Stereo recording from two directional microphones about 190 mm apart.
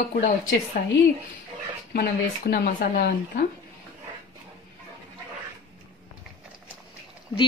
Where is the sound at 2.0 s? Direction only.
55° left (ahead or behind).